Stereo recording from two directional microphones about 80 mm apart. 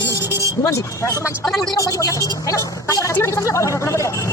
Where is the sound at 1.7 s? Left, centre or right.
Left.